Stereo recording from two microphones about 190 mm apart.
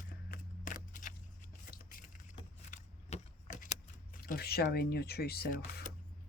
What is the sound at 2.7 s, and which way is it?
Keys jangling, 40° left (ahead or behind).